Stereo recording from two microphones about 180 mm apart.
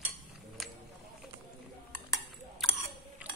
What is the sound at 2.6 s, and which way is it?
Chewing, centre (ahead or behind).